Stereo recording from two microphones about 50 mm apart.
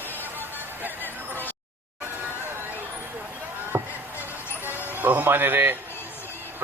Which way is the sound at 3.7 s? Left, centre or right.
Right.